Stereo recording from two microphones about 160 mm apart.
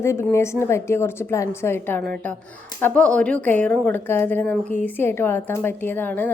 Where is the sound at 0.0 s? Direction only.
15° left (ahead or behind).